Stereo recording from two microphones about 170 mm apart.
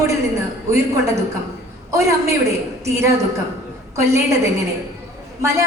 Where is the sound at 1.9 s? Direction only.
15° right (ahead or behind).